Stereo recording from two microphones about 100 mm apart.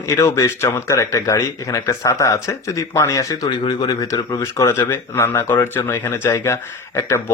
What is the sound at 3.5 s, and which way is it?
Speech, 45° left (ahead or behind).